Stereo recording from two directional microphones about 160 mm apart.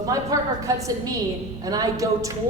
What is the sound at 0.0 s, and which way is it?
Speech, 20° right (ahead or behind).